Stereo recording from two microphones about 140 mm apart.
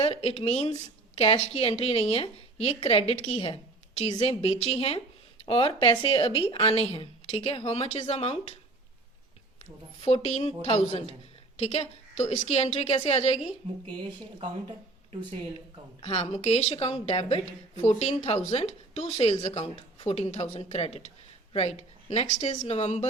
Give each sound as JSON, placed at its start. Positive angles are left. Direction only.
{"t": 0.0, "sound": "speech", "side_deg": 45}
{"t": 10.0, "sound": "speech", "side_deg": 50}
{"t": 16.0, "sound": "speech", "side_deg": 45}